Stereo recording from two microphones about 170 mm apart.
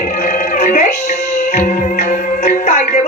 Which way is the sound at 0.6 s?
45° left (ahead or behind).